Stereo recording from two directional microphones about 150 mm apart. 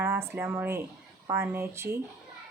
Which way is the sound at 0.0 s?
15° right (ahead or behind).